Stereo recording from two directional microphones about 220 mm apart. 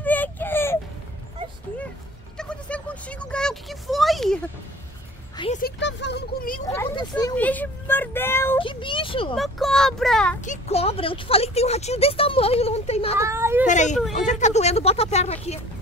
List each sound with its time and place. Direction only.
0.0 s baby cry: 5° left (ahead or behind)
2.3 s a sound: 5° left (ahead or behind)
5.6 s a sound: 50° left (ahead or behind)
6.6 s vehicle: 15° left (ahead or behind)
8.5 s a sound: 25° left (ahead or behind)
9.4 s speech: centre (ahead or behind)
10.4 s speech: 30° left (ahead or behind)
13.2 s a woman's voice: 10° right (ahead or behind)
13.7 s speech: 35° left (ahead or behind)